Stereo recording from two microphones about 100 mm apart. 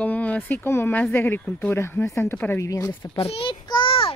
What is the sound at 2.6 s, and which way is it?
Speech, 35° left (ahead or behind).